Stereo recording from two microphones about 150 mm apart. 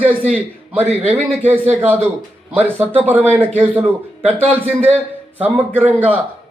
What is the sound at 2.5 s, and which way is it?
A man's voice, 10° right (ahead or behind).